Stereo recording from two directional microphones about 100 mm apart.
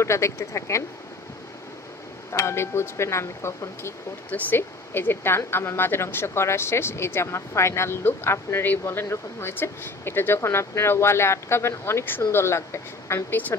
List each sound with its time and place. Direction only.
0.0 s speech: 30° left (ahead or behind)
2.3 s speech: 25° left (ahead or behind)